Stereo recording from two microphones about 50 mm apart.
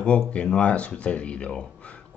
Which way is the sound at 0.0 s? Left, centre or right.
Left.